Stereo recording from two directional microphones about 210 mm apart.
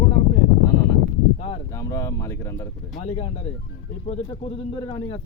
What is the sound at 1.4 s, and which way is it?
Speech, 30° left (ahead or behind).